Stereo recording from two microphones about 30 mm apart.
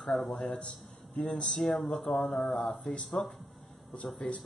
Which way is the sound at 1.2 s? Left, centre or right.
Left.